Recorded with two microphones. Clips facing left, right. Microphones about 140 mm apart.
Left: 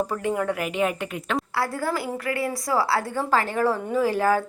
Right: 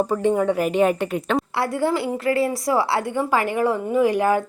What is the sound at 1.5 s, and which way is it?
A woman's voice, 25° right (ahead or behind).